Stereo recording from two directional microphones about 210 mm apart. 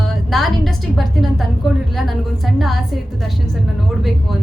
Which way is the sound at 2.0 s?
Centre (ahead or behind).